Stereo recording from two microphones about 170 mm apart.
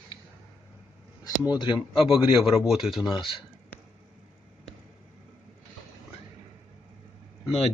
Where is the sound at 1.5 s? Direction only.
25° left (ahead or behind).